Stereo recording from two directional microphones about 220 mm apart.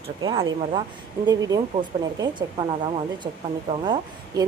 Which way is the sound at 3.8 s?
20° right (ahead or behind).